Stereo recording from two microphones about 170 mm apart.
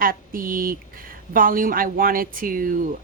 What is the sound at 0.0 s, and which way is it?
Speech, 55° right (ahead or behind).